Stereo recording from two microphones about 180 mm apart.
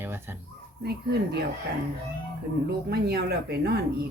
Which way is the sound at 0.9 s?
65° right (ahead or behind).